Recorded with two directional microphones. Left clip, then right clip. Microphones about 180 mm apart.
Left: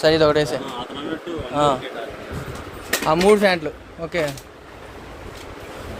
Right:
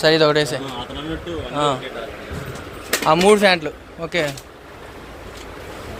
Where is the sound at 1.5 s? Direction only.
35° left (ahead or behind).